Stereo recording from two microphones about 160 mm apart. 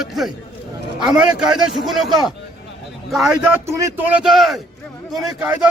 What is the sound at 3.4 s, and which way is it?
Speech, 15° right (ahead or behind).